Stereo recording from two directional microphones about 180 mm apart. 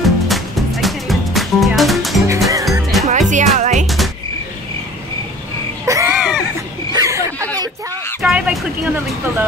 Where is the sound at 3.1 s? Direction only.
45° right (ahead or behind).